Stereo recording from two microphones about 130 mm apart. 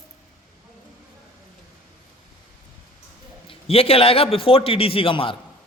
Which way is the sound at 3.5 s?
50° left (ahead or behind).